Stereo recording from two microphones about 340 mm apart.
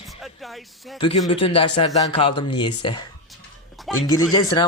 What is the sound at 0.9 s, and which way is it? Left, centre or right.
Speech, centre.